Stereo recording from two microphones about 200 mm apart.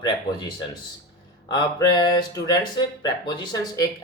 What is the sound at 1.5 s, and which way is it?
Speech, 20° left (ahead or behind).